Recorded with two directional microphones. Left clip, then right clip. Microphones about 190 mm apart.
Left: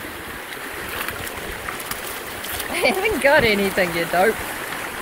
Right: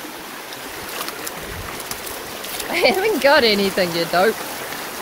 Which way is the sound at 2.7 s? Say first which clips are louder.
Right 3 dB; 25° right (ahead or behind).